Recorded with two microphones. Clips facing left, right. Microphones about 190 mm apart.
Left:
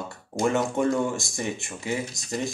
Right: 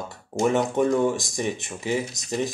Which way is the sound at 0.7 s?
20° right (ahead or behind).